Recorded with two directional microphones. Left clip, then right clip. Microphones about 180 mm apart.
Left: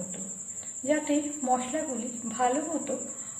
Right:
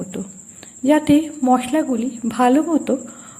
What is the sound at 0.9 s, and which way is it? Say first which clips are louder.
A woman's voice: right 12 dB; 40° right (ahead or behind).